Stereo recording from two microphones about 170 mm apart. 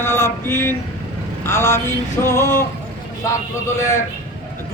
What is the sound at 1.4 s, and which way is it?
Speech, 15° left (ahead or behind).